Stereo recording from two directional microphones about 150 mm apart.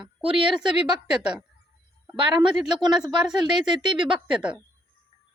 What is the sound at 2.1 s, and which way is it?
Speech, 35° right (ahead or behind).